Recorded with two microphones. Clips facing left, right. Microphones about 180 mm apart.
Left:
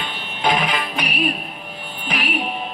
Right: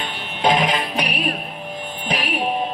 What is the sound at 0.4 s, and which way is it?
Music, 35° right (ahead or behind).